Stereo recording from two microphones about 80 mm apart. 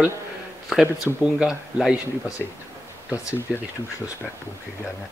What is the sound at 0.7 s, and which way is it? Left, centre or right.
Speech, centre.